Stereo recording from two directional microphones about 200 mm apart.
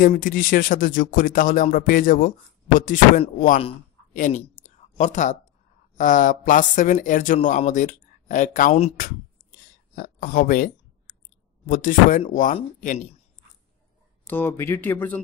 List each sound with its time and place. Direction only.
0.0 s speech: 45° left (ahead or behind)
9.9 s clicking: 45° left (ahead or behind)
11.6 s speech: 40° left (ahead or behind)
14.2 s speech: 10° left (ahead or behind)